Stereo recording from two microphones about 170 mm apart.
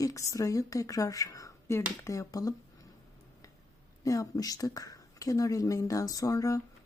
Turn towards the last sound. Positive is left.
turn(degrees=20)  # may be behind; listen again after turning